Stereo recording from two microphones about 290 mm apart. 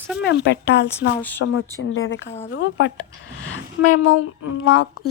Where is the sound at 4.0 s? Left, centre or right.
Left.